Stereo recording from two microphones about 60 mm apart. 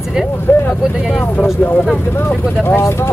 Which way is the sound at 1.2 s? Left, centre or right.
Left.